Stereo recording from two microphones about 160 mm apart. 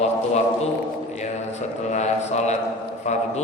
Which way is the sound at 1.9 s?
45° left (ahead or behind).